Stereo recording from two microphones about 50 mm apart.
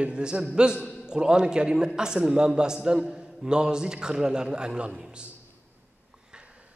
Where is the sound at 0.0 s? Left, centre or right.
Centre.